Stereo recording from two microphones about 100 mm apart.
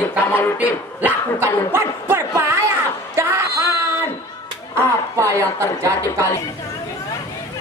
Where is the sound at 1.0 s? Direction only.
20° right (ahead or behind).